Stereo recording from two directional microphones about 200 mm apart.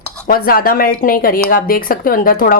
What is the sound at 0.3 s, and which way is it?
A woman's voice, 50° left (ahead or behind).